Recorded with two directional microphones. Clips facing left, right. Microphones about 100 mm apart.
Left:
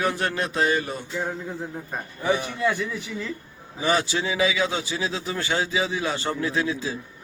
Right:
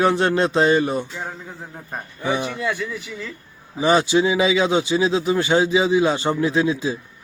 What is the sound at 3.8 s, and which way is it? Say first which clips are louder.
A man's voice: right 7 dB; 20° right (ahead or behind).